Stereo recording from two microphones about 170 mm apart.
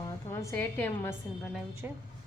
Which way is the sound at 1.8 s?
10° right (ahead or behind).